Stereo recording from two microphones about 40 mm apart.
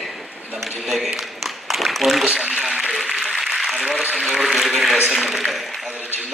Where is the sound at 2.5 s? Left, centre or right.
Centre.